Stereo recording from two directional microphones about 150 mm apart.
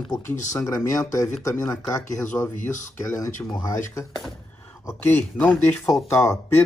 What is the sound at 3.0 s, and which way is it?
Speech, 20° left (ahead or behind).